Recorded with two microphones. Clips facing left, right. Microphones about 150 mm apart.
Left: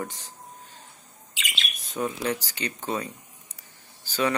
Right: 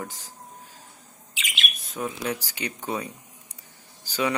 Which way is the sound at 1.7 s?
Centre (ahead or behind).